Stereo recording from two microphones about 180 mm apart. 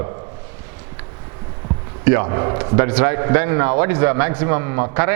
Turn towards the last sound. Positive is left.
turn(degrees=-15)  # may be behind; listen again after turning